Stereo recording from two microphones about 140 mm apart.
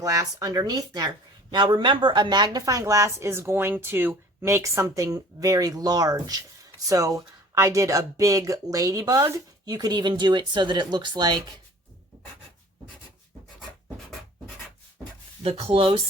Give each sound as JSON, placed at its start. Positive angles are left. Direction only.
{"t": 0.0, "sound": "speech", "side_deg": -25}
{"t": 15.4, "sound": "speech", "side_deg": -40}